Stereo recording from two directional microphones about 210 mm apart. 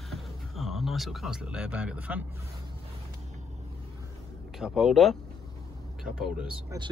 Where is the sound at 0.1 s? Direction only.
Centre (ahead or behind).